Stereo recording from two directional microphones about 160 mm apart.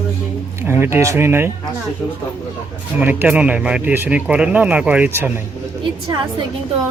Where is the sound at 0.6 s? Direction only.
15° right (ahead or behind).